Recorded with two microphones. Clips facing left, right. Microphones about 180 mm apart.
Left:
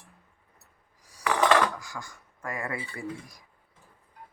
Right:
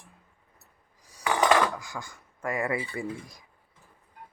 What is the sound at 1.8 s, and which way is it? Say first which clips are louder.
Speech: right 2 dB; 25° right (ahead or behind).